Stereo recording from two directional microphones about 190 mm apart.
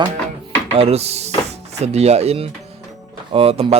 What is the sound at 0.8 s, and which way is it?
Speech, 35° right (ahead or behind).